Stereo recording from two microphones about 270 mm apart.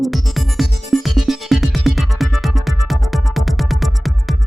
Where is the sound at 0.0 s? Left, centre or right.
Centre.